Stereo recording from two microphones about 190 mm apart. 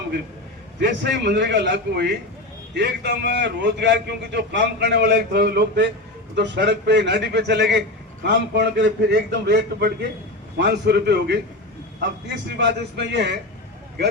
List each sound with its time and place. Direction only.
0.8 s a man's voice: 65° right (ahead or behind)
12.5 s a man's voice: 65° right (ahead or behind)